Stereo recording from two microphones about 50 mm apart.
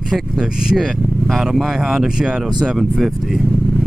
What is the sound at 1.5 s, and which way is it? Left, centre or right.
Speech, centre.